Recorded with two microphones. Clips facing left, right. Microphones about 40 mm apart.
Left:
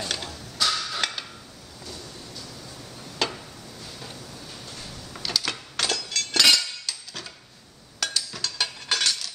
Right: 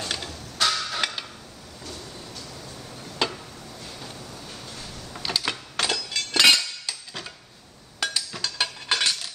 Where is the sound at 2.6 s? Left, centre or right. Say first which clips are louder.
Right 2 dB; centre.